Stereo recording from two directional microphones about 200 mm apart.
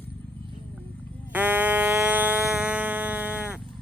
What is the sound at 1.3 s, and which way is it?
Frog, 10° right (ahead or behind).